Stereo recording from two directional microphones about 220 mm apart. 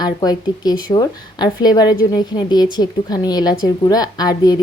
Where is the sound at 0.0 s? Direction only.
15° left (ahead or behind).